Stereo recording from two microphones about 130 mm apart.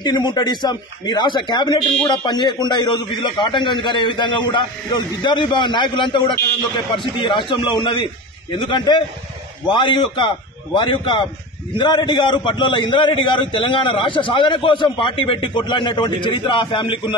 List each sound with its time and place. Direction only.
0.0 s a man's voice: 35° left (ahead or behind)